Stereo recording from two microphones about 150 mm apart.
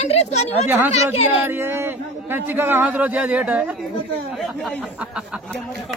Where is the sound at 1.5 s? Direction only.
15° right (ahead or behind).